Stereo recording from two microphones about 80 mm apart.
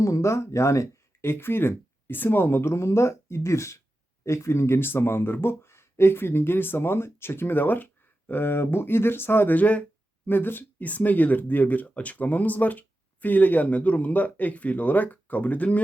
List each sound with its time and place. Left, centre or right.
0.0 s speech: left; by 15.8 s centre